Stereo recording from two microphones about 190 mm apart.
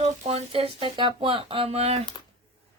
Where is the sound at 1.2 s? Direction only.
30° right (ahead or behind).